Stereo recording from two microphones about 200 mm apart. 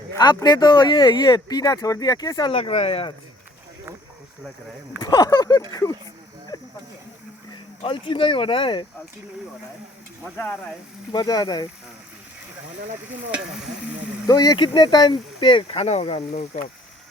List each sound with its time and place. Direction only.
0.2 s speech: 20° left (ahead or behind)
5.0 s speech: 20° left (ahead or behind)
6.5 s a sound: 20° left (ahead or behind)
7.8 s speech: 25° left (ahead or behind)
11.1 s speech: 20° left (ahead or behind)
14.3 s speech: 20° left (ahead or behind)